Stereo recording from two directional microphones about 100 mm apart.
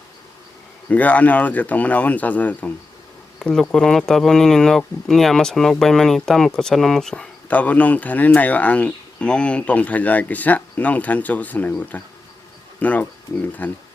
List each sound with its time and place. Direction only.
0.9 s speech: 15° left (ahead or behind)